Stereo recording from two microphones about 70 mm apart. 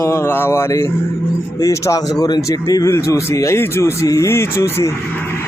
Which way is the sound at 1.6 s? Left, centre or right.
Left.